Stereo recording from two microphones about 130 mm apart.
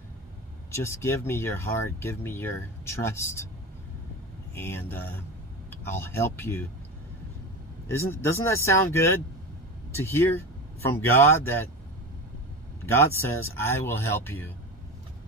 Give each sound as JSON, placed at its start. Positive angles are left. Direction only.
{"t": 0.7, "sound": "speech", "side_deg": 20}
{"t": 4.6, "sound": "speech", "side_deg": 20}
{"t": 7.9, "sound": "speech", "side_deg": 20}
{"t": 12.8, "sound": "speech", "side_deg": 20}